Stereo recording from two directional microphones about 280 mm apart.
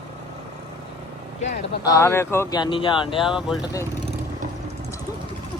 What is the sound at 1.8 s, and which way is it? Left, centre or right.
Speech, centre.